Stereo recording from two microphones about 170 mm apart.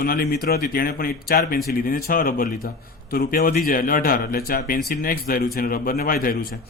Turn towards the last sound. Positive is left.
turn(degrees=55)  # may be behind; listen again after turning